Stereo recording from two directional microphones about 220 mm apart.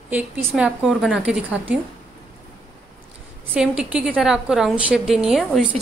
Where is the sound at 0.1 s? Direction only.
5° right (ahead or behind).